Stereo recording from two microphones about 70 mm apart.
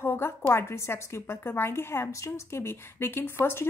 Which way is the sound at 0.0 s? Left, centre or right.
Left.